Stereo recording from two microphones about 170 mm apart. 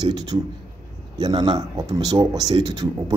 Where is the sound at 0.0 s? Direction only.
25° right (ahead or behind).